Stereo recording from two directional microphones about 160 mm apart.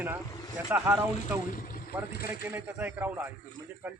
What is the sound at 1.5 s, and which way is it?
Speech, 60° left (ahead or behind).